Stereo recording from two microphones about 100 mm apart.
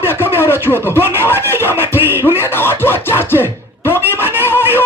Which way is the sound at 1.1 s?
25° left (ahead or behind).